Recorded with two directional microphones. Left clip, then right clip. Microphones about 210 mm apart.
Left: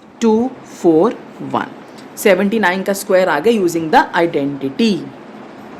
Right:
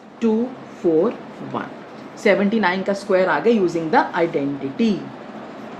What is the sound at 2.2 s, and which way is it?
A woman's voice, 35° left (ahead or behind).